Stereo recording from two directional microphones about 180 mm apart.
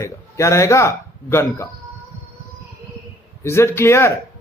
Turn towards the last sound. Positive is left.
turn(degrees=15)  # may be behind; listen again after turning